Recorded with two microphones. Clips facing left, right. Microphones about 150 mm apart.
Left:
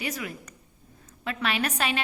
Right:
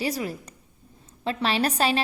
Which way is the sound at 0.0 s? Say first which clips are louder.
Right 5 dB; 35° right (ahead or behind).